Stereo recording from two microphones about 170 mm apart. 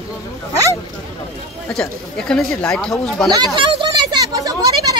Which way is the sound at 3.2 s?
25° right (ahead or behind).